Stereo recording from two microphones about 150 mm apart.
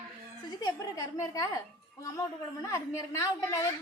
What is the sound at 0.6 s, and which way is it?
A woman's voice, 25° left (ahead or behind).